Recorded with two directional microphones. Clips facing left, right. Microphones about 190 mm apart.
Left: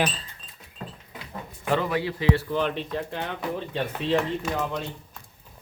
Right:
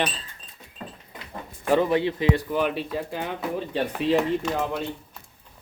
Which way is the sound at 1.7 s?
20° right (ahead or behind).